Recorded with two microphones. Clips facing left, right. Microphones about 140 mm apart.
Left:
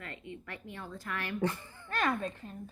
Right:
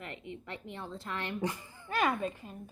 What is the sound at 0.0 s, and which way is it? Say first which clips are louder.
A woman's voice: right 1 dB; 20° right (ahead or behind).